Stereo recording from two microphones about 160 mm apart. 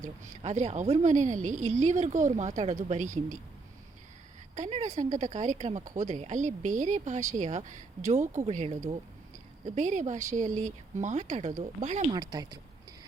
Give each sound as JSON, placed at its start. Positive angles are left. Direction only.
{"t": 0.0, "sound": "speech", "side_deg": -45}
{"t": 4.5, "sound": "speech", "side_deg": -45}
{"t": 12.1, "sound": "speech", "side_deg": -25}